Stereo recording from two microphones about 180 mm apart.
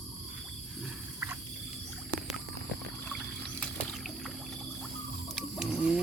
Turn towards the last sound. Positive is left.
turn(degrees=-5)  # may be behind; listen again after turning